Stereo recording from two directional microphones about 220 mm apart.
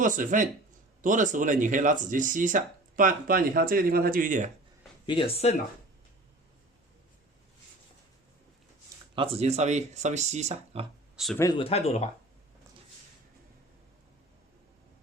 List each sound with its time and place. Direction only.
0.0 s speech: 35° right (ahead or behind)
5.0 s speech: 25° left (ahead or behind)
9.1 s speech: 25° right (ahead or behind)
11.3 s speech: 20° left (ahead or behind)